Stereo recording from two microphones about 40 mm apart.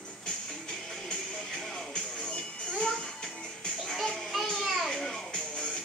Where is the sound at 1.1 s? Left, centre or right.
Centre.